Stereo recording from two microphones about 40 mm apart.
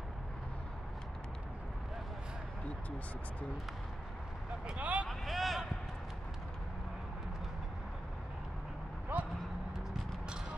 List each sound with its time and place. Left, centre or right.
4.7 s speech: right
5.0 s speech: centre
9.1 s speech: right